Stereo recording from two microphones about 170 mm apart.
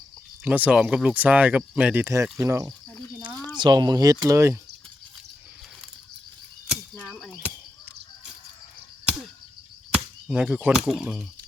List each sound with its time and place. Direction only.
0.4 s speech: 10° right (ahead or behind)
2.5 s speech: 20° right (ahead or behind)
6.9 s a sound: 5° left (ahead or behind)
10.2 s speech: 10° right (ahead or behind)